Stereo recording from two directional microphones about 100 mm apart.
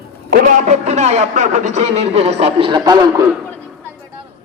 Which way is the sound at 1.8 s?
90° right.